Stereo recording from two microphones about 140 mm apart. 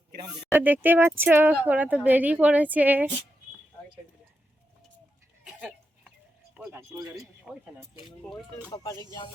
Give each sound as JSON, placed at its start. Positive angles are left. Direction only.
{"t": 0.5, "sound": "speech", "side_deg": -15}
{"t": 5.5, "sound": "goat", "side_deg": -5}
{"t": 6.7, "sound": "speech", "side_deg": -20}
{"t": 7.5, "sound": "speech", "side_deg": -5}
{"t": 8.7, "sound": "speech", "side_deg": 25}